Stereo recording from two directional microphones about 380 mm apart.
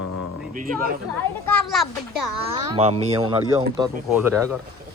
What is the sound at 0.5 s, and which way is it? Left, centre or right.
Speech, right.